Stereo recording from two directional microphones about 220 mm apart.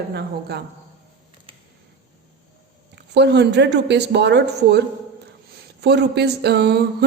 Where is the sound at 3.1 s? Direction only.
50° right (ahead or behind).